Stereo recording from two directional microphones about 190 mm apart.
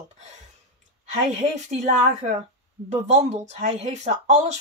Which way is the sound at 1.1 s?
40° right (ahead or behind).